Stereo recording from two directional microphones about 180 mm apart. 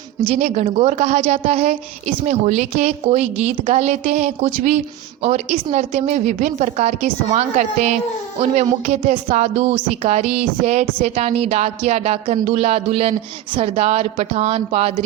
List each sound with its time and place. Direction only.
0.3 s a woman's voice: 40° right (ahead or behind)